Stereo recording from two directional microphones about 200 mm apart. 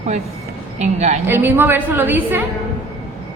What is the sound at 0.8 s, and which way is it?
Speech, 35° right (ahead or behind).